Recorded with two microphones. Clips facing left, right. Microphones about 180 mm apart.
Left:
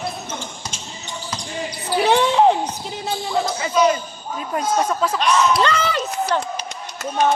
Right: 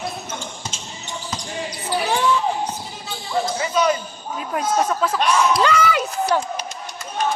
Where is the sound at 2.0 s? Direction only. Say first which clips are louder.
Left 6 dB; 70° left (ahead or behind).